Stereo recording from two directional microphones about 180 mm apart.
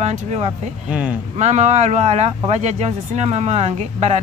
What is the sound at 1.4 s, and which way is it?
Speech, 40° right (ahead or behind).